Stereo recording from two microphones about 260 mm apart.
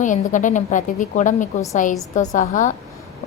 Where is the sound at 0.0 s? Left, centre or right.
Left.